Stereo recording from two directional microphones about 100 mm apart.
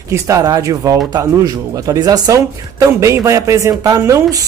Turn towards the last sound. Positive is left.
turn(degrees=-35)  # may be behind; listen again after turning